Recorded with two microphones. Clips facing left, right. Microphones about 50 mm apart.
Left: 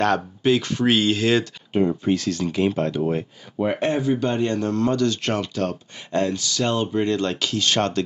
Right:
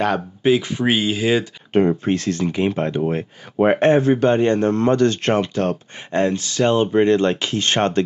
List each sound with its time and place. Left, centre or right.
0.0 s speech: centre
1.9 s speech: right
3.5 s speech: right